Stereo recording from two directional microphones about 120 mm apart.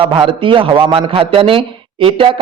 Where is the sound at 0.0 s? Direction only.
45° right (ahead or behind).